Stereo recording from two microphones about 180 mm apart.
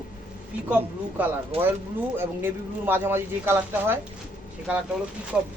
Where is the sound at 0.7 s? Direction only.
10° right (ahead or behind).